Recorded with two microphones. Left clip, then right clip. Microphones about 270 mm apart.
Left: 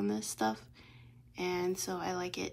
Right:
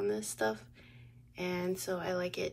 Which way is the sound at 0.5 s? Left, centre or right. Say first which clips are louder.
Right 1 dB; left.